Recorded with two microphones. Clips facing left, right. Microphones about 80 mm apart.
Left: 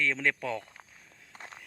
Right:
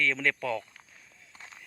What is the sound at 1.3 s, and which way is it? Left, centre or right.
Walk, left.